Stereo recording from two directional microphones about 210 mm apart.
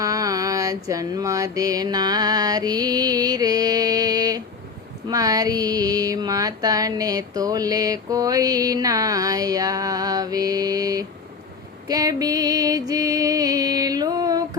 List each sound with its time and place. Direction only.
0.0 s mantra: 15° right (ahead or behind)
5.0 s a sound: 15° right (ahead or behind)
11.9 s music: 15° right (ahead or behind)